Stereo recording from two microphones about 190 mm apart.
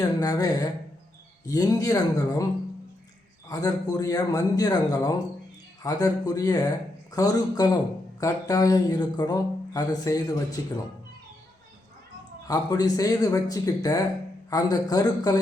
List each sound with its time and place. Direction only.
0.0 s speech: 20° left (ahead or behind)
3.5 s speech: 20° left (ahead or behind)
12.5 s speech: 20° left (ahead or behind)